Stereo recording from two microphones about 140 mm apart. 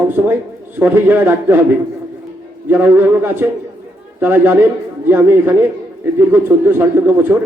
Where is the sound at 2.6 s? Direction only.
15° right (ahead or behind).